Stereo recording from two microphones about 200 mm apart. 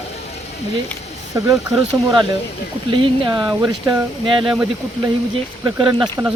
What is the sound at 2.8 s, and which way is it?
Speech, 25° right (ahead or behind).